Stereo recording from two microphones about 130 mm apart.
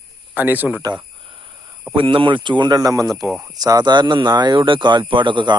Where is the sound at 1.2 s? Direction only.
40° right (ahead or behind).